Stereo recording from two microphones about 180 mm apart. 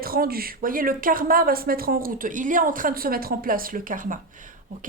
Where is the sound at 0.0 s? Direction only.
55° right (ahead or behind).